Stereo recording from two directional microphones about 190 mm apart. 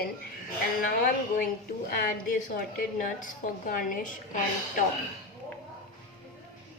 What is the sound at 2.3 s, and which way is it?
A woman's voice, 45° left (ahead or behind).